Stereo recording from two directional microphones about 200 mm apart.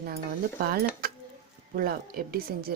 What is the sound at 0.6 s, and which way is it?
Speech, 50° right (ahead or behind).